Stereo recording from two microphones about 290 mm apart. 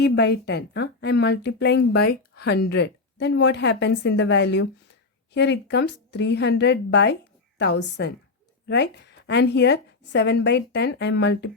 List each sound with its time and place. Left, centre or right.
0.0 s a woman's voice: left